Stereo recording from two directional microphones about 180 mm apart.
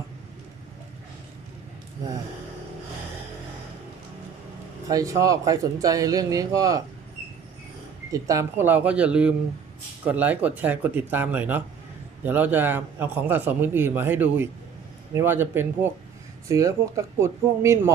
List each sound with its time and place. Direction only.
4.9 s speech: 20° right (ahead or behind)
8.1 s a man's voice: 15° right (ahead or behind)